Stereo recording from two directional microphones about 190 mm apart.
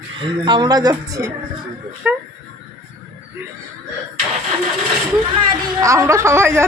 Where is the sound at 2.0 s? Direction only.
5° right (ahead or behind).